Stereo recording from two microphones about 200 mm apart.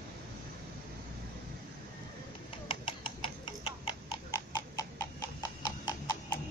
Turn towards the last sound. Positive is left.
turn(degrees=20)  # may be behind; listen again after turning